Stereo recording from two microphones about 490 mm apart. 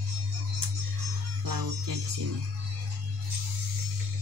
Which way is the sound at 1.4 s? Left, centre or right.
Right.